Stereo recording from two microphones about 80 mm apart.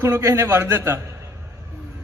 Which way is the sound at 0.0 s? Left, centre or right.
Right.